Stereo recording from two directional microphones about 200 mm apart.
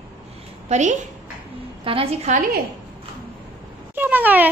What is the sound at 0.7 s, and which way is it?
A woman's voice, 35° right (ahead or behind).